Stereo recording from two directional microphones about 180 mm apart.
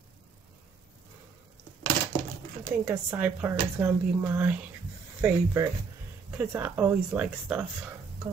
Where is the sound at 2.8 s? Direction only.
10° right (ahead or behind).